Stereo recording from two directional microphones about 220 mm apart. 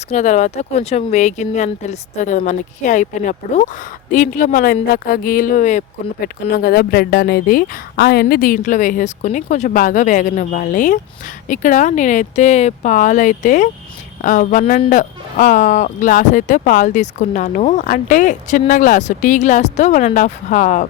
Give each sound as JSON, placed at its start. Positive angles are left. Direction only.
{"t": 0.1, "sound": "speech", "side_deg": 30}